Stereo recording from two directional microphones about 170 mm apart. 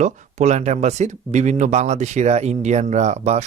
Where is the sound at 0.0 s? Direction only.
45° right (ahead or behind).